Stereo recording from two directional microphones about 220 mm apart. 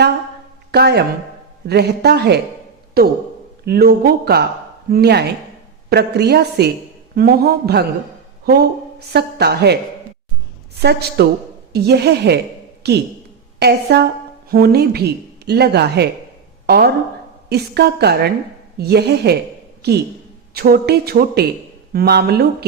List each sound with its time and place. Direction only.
0.7 s speech: 45° right (ahead or behind)
9.1 s speech: 45° right (ahead or behind)
10.8 s speech: 50° right (ahead or behind)